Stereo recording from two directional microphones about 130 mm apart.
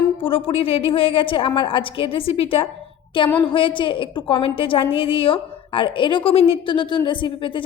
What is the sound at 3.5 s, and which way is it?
A woman's voice, 40° left (ahead or behind).